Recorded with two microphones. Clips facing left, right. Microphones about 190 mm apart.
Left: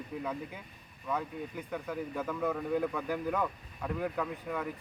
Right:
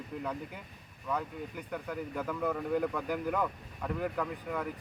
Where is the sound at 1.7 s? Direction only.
Centre (ahead or behind).